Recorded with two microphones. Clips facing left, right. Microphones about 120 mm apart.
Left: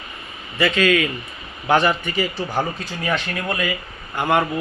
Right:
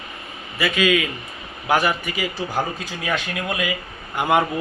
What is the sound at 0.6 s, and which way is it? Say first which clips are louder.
Speech: left 2 dB; 10° right (ahead or behind).